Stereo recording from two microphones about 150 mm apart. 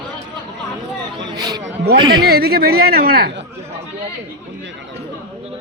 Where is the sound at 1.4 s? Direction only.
25° right (ahead or behind).